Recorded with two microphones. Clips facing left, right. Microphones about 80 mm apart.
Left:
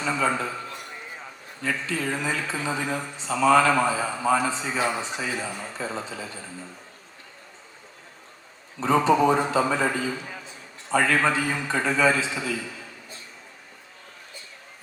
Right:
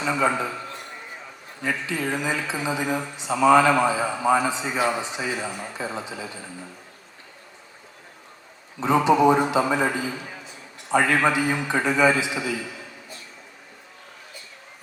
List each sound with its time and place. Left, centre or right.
0.0 s speech: centre
1.6 s speech: centre
8.8 s speech: centre